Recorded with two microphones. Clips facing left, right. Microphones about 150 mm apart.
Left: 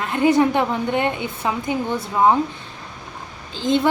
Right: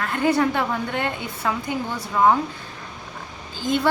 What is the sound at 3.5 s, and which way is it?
Speech, 25° left (ahead or behind).